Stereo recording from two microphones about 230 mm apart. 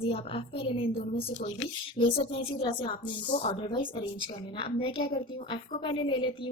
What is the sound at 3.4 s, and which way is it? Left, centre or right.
A woman's voice, left.